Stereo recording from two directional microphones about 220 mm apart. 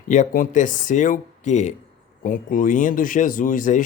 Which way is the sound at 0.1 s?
35° left (ahead or behind).